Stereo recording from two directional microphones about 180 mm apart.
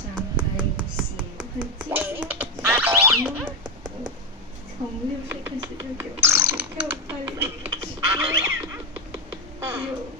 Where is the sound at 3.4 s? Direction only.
25° right (ahead or behind).